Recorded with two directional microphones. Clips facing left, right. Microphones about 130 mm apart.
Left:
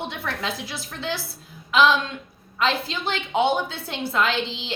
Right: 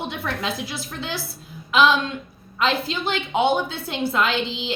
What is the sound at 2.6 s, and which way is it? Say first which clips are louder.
A woman's voice: right 1 dB; 10° right (ahead or behind).